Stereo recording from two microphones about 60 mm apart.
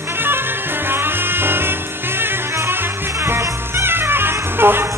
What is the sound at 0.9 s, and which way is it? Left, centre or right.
Music, right.